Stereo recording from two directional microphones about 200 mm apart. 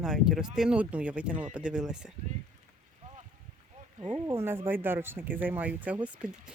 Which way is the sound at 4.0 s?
30° right (ahead or behind).